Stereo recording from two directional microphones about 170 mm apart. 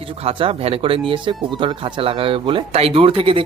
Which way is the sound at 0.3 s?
35° right (ahead or behind).